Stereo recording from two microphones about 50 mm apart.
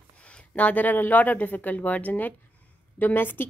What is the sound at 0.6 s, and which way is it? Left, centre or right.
A woman's voice, left.